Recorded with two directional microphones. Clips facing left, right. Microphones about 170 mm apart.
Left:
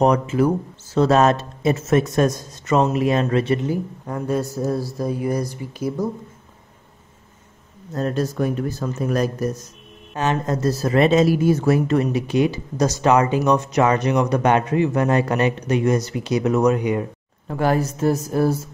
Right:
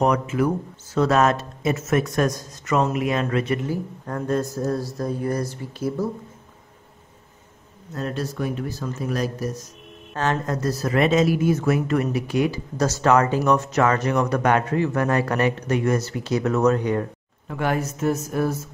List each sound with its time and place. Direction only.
0.0 s speech: 30° left (ahead or behind)
4.0 s speech: 10° left (ahead or behind)
7.9 s speech: 40° left (ahead or behind)
10.1 s speech: 15° left (ahead or behind)
17.5 s speech: 35° left (ahead or behind)